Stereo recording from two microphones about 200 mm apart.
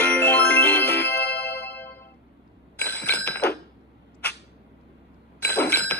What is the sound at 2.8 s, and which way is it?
Bicycle bell, 10° left (ahead or behind).